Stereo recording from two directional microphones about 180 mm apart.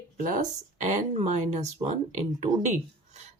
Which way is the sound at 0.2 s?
45° right (ahead or behind).